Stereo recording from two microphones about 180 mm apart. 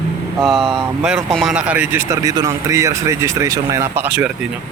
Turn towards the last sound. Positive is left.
turn(degrees=-10)  # may be behind; listen again after turning